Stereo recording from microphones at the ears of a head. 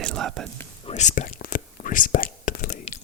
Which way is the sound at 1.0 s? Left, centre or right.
Left.